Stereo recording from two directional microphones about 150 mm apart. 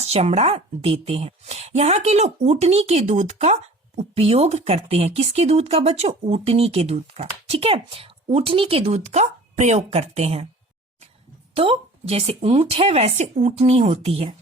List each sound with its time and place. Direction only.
0.0 s a woman's voice: 45° right (ahead or behind)
8.8 s a woman's voice: 50° right (ahead or behind)
11.5 s speech: 40° right (ahead or behind)